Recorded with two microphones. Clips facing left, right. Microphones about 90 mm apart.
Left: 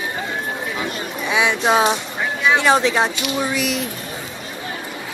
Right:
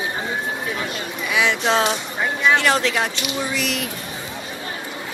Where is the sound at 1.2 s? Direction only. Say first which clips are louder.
Left 2 dB; 20° left (ahead or behind).